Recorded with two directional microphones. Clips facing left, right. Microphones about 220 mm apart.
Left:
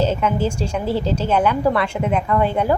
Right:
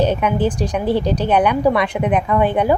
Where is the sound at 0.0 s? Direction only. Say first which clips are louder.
Right 2 dB; 15° right (ahead or behind).